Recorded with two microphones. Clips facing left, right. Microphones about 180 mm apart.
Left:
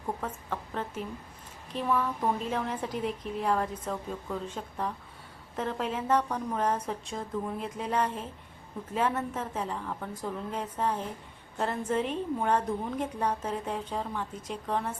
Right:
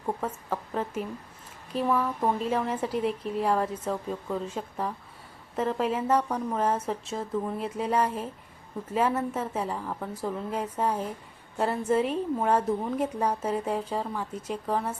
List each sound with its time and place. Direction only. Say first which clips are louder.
0.2 s a woman's voice: right 4 dB; 5° right (ahead or behind)